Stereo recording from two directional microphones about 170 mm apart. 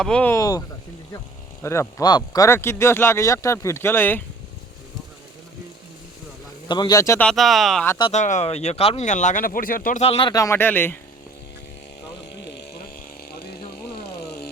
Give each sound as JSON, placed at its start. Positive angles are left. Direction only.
{"t": 0.0, "sound": "speech", "side_deg": 5}
{"t": 0.3, "sound": "speech", "side_deg": 20}
{"t": 1.6, "sound": "speech", "side_deg": 15}
{"t": 6.7, "sound": "speech", "side_deg": 25}
{"t": 7.3, "sound": "speech", "side_deg": 0}
{"t": 8.1, "sound": "speech", "side_deg": 45}
{"t": 10.0, "sound": "speech", "side_deg": 35}
{"t": 10.3, "sound": "speech", "side_deg": 15}
{"t": 12.4, "sound": "a sound", "side_deg": 85}
{"t": 13.9, "sound": "a sound", "side_deg": 70}